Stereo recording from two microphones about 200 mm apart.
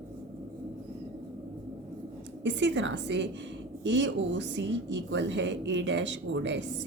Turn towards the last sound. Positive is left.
turn(degrees=-65)  # may be behind; listen again after turning